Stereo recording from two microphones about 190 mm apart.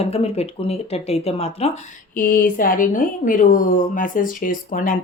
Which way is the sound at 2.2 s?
50° left (ahead or behind).